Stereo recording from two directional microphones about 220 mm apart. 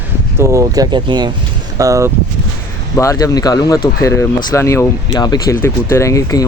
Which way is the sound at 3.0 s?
15° left (ahead or behind).